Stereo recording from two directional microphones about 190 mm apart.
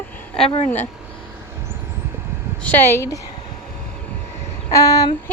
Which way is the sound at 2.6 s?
10° left (ahead or behind).